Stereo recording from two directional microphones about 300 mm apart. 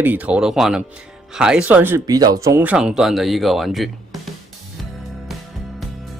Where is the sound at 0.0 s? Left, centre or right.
Centre.